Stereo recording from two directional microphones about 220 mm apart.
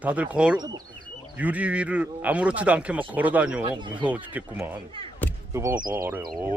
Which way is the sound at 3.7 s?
20° right (ahead or behind).